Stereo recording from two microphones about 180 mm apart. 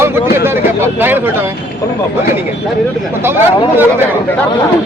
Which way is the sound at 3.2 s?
15° right (ahead or behind).